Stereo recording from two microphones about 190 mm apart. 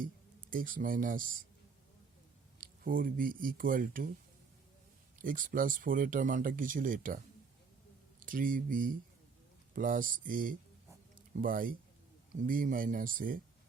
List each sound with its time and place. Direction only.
0.5 s speech: 45° right (ahead or behind)
2.6 s speech: 45° right (ahead or behind)
5.1 s speech: 45° right (ahead or behind)
8.2 s speech: 45° right (ahead or behind)